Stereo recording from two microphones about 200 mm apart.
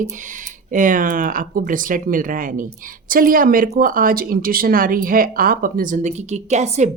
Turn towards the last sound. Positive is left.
turn(degrees=-35)  # may be behind; listen again after turning